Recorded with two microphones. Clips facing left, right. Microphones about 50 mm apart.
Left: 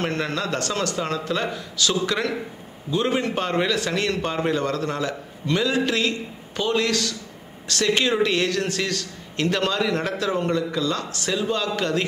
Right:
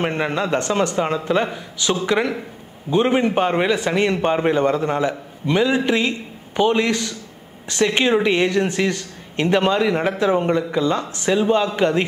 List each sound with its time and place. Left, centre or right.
0.0 s a man's voice: right